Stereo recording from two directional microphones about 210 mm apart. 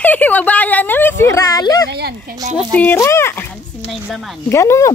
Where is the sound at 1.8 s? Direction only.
50° right (ahead or behind).